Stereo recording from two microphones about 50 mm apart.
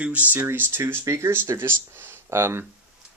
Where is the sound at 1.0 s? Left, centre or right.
Right.